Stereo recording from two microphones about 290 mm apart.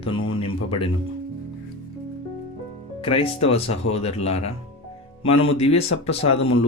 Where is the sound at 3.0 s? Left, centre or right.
Centre.